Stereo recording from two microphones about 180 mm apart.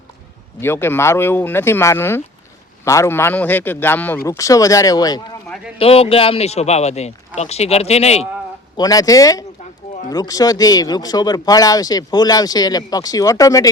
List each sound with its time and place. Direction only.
0.6 s a man's voice: 15° left (ahead or behind)
5.8 s speech: 30° left (ahead or behind)
8.7 s speech: 20° left (ahead or behind)